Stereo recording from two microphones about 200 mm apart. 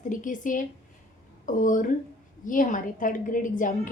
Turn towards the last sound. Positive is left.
turn(degrees=40)  # may be behind; listen again after turning